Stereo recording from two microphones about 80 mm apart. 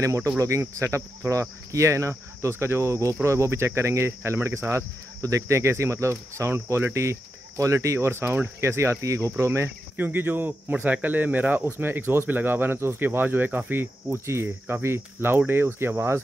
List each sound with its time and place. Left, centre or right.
0.0 s speech: right
0.4 s cricket: right
9.9 s speech: right
14.1 s speech: right